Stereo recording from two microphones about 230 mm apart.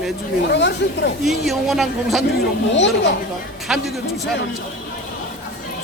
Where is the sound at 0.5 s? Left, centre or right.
Left.